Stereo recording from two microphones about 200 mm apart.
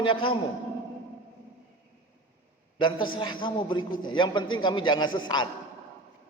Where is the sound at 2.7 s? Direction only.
25° left (ahead or behind).